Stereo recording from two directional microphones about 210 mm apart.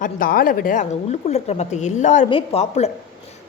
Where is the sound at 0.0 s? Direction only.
40° left (ahead or behind).